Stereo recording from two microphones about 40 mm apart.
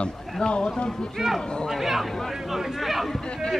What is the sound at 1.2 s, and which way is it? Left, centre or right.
Speech, centre.